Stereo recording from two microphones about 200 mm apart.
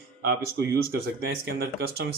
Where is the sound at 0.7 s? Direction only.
50° right (ahead or behind).